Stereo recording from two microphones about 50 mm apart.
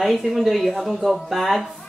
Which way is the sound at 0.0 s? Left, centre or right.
Centre.